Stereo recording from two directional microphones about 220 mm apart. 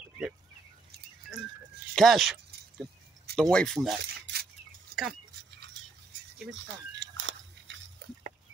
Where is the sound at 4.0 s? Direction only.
45° right (ahead or behind).